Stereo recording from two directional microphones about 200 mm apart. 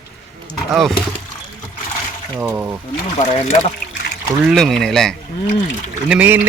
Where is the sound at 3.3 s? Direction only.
30° left (ahead or behind).